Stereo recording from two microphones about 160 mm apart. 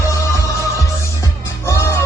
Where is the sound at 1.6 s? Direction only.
15° left (ahead or behind).